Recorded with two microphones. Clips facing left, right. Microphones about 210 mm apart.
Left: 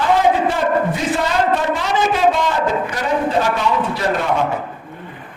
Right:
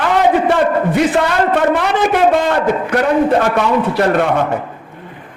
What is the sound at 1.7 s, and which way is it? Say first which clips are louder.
A man's voice: right 4 dB; 60° right (ahead or behind).